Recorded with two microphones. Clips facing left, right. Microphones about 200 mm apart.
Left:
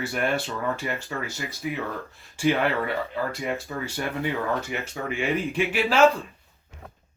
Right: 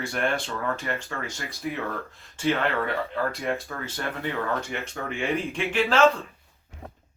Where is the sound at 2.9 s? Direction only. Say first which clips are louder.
Even; centre (ahead or behind).